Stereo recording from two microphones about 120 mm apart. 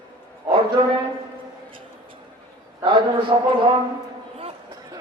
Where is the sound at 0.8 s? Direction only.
40° right (ahead or behind).